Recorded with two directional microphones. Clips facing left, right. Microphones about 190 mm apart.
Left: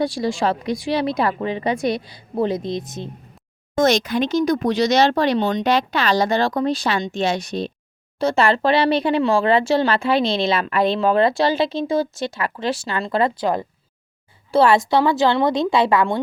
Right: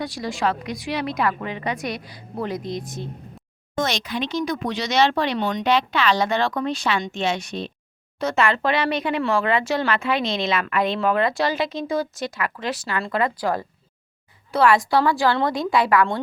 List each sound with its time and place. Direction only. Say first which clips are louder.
0.0 s a woman's voice: left 4 dB; 30° left (ahead or behind)
3.8 s speech: left 7 dB; 45° left (ahead or behind)
5.4 s a woman's voice: left 4 dB; 25° left (ahead or behind)
5.6 s a woman's voice: left 1 dB; 40° left (ahead or behind); by 16.1 s 25° left (ahead or behind)